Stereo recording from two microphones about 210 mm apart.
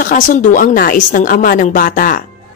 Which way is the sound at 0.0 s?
40° left (ahead or behind).